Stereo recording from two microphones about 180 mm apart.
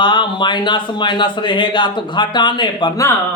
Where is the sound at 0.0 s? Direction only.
25° left (ahead or behind).